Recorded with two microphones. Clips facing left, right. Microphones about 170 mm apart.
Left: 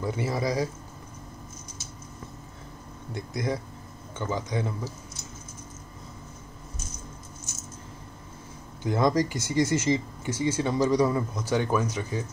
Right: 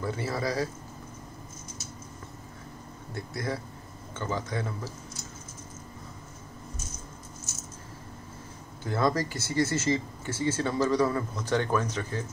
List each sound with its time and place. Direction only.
0.0 s speech: 15° left (ahead or behind)
3.2 s speech: 15° left (ahead or behind)
8.8 s speech: 15° left (ahead or behind)